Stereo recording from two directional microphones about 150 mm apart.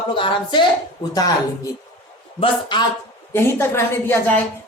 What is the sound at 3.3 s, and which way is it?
A woman's voice, 15° left (ahead or behind).